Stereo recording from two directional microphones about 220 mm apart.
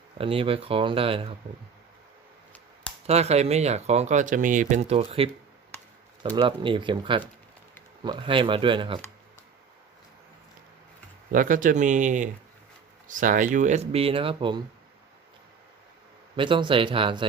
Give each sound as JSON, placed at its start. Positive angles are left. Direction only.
{"t": 0.2, "sound": "speech", "side_deg": -25}
{"t": 3.1, "sound": "speech", "side_deg": -30}
{"t": 6.3, "sound": "speech", "side_deg": -20}
{"t": 11.3, "sound": "speech", "side_deg": -35}
{"t": 16.3, "sound": "speech", "side_deg": -20}